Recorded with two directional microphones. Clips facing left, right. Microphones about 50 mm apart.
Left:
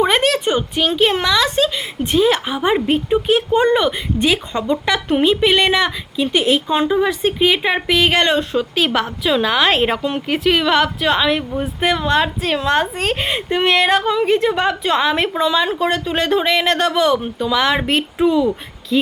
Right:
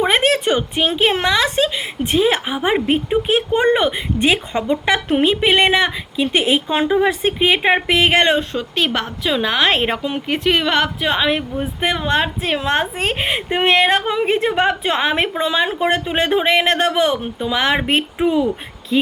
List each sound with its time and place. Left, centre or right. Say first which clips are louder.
0.0 s a sound: even; centre
0.8 s a woman's voice: left 3 dB; right
8.4 s a woman's voice: left 2 dB; centre
14.0 s a woman's voice: left 2 dB; right